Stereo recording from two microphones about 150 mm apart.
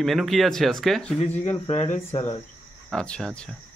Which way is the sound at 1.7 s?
45° left (ahead or behind).